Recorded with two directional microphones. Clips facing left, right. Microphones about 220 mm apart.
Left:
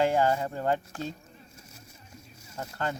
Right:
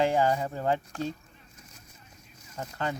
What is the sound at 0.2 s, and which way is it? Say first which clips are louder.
Speech: even; 5° right (ahead or behind).